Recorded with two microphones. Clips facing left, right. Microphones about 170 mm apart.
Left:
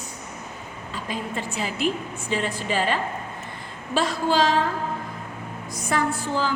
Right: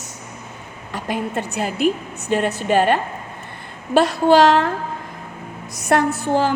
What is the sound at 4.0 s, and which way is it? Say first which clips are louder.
Speech: right 8 dB; 70° right (ahead or behind).